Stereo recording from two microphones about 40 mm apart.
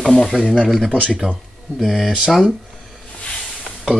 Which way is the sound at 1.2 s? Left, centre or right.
Right.